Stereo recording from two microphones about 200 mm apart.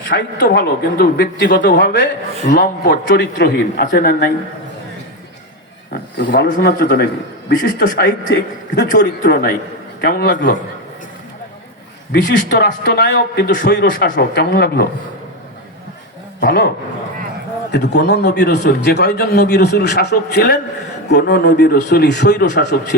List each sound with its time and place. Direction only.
0.1 s a man's voice: 60° left (ahead or behind)
5.9 s a man's voice: 50° left (ahead or behind)
12.1 s a man's voice: 60° left (ahead or behind)
16.4 s a man's voice: 55° left (ahead or behind)